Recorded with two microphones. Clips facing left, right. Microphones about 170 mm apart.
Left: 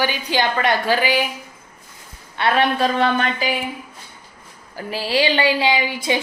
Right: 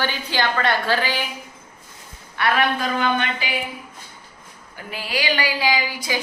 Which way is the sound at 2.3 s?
25° left (ahead or behind).